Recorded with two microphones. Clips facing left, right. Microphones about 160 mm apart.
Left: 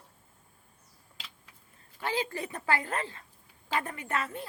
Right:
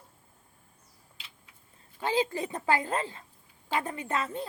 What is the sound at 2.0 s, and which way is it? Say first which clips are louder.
Speech: right 4 dB; 20° right (ahead or behind).